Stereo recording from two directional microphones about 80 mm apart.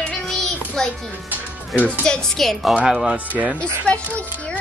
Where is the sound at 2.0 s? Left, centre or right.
Centre.